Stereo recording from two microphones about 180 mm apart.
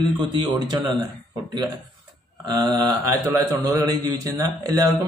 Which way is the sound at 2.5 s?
25° right (ahead or behind).